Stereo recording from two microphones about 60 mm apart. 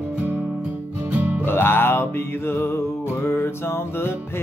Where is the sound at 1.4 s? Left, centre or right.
Left.